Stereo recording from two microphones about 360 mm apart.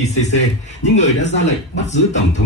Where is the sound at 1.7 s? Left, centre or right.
Centre.